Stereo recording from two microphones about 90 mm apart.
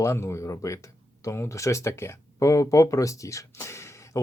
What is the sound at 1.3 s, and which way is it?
Speech, 35° left (ahead or behind).